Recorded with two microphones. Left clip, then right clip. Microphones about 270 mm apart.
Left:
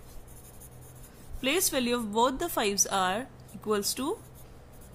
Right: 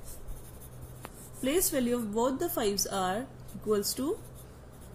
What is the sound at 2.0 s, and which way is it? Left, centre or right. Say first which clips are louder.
Speech: left 3 dB; left.